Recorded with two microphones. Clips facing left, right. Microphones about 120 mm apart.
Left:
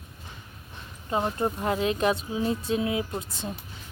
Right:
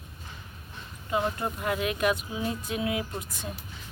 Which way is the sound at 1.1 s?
30° left (ahead or behind).